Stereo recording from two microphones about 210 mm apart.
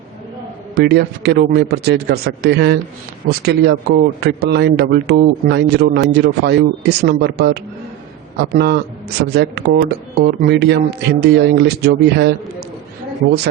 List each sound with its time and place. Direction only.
0.8 s speech: 50° right (ahead or behind)